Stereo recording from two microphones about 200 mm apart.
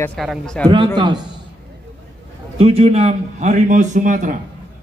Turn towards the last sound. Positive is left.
turn(degrees=-40)  # may be behind; listen again after turning